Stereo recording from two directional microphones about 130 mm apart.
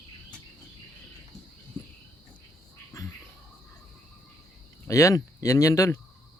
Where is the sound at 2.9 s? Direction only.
25° left (ahead or behind).